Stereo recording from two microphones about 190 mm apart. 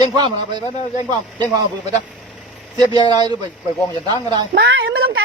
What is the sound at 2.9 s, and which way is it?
A man's voice, 25° right (ahead or behind).